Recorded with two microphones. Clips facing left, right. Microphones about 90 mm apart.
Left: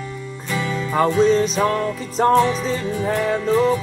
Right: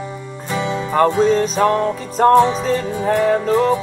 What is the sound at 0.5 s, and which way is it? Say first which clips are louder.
Music: right 3 dB; 25° right (ahead or behind).